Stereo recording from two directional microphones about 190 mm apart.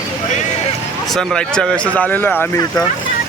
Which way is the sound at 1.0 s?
Centre (ahead or behind).